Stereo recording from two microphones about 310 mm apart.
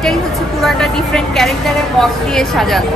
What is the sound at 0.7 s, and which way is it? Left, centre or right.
A woman's voice, centre.